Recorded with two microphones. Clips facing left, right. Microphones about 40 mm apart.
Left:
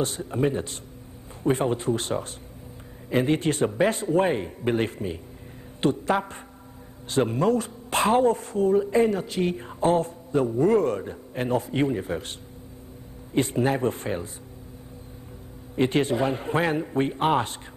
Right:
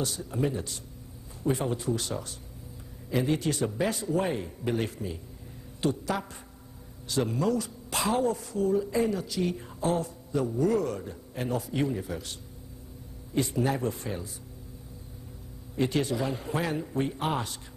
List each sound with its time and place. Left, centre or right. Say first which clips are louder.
0.0 s speech: left 5 dB; left
15.7 s speech: left 5 dB; left